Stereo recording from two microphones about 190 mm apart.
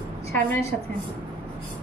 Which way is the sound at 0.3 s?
10° left (ahead or behind).